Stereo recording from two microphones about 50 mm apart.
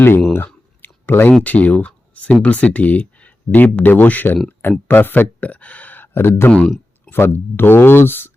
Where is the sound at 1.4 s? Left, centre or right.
Left.